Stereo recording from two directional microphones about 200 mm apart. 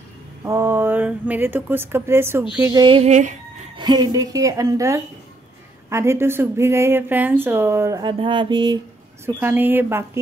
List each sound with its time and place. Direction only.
0.4 s speech: 10° right (ahead or behind)
2.5 s a sound: 15° right (ahead or behind); by 3.3 s 35° right (ahead or behind)
3.7 s speech: 20° right (ahead or behind)
9.4 s speech: 10° right (ahead or behind)